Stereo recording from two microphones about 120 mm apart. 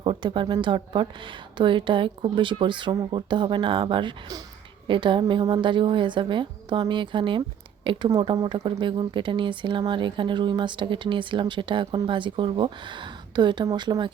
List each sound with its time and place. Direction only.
0.0 s speech: 45° right (ahead or behind)